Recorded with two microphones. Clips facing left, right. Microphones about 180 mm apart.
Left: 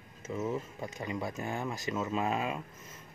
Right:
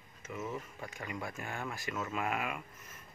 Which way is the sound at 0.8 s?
20° left (ahead or behind).